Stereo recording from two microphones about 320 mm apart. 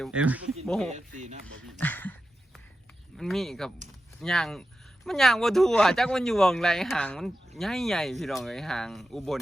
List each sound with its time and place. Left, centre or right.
0.0 s speech: centre
0.9 s speech: right
1.8 s a sound: centre
3.2 s speech: centre